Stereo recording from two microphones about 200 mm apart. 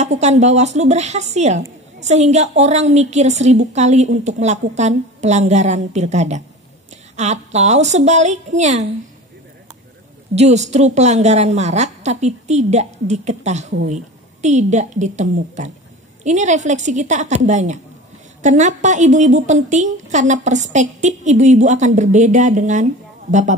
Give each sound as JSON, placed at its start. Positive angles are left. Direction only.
{"t": 0.0, "sound": "a woman's voice", "side_deg": -35}
{"t": 10.3, "sound": "a woman's voice", "side_deg": -35}